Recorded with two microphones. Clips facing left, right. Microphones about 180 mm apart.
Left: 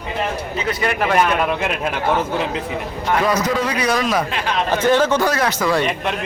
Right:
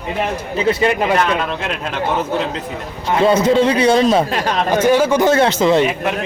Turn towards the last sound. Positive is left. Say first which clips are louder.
# right 6 dB
turn(degrees=-25)  # may be behind; listen again after turning